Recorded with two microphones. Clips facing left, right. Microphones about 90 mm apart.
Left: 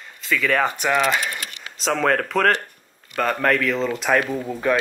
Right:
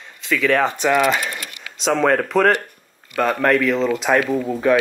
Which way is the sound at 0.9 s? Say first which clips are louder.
Right 4 dB; 10° right (ahead or behind).